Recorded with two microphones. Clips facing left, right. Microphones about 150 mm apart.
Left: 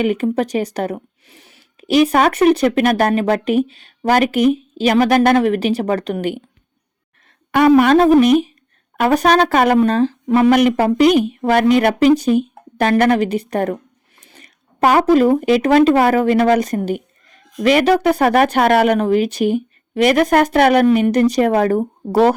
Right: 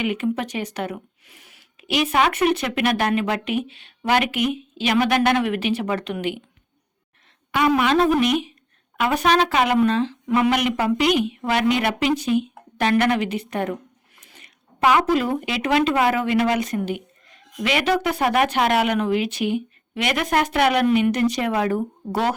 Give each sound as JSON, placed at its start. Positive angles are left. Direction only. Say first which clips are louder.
{"t": 0.0, "sound": "speech", "louder": "left 6 dB", "side_deg": 40}
{"t": 7.7, "sound": "speech", "louder": "left 8 dB", "side_deg": 40}